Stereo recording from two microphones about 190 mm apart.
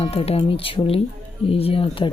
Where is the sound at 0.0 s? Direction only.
30° left (ahead or behind).